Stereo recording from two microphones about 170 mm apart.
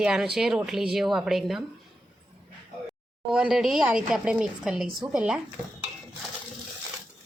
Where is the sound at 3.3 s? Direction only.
5° right (ahead or behind).